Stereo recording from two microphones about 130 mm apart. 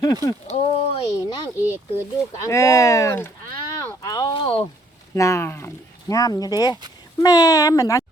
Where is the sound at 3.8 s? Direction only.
25° left (ahead or behind).